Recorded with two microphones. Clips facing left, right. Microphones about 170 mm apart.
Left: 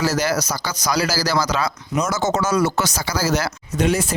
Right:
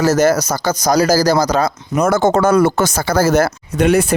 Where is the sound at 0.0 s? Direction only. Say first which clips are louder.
Right 8 dB; 50° right (ahead or behind).